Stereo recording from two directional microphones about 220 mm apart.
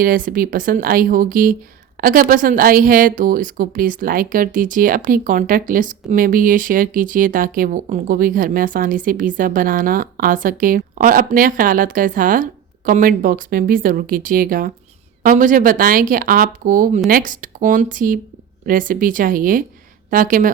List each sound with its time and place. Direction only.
0.0 s a woman's voice: 40° right (ahead or behind)